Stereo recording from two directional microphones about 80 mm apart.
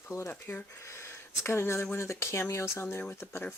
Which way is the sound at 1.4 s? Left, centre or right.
Left.